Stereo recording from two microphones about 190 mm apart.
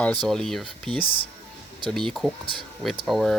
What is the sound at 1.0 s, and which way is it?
Speech, 30° left (ahead or behind).